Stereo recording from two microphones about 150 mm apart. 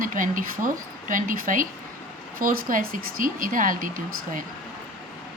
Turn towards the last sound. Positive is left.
turn(degrees=-65)  # may be behind; listen again after turning